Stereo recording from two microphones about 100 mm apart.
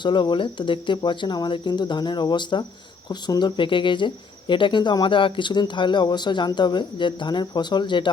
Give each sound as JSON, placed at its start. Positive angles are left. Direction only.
{"t": 0.0, "sound": "speech", "side_deg": 50}